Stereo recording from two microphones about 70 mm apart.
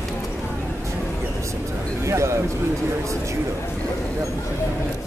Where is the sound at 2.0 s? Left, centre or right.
Right.